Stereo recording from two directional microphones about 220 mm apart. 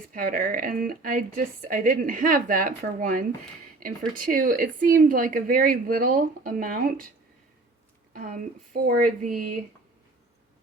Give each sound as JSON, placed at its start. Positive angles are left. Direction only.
{"t": 0.1, "sound": "speech", "side_deg": -40}
{"t": 8.1, "sound": "speech", "side_deg": -40}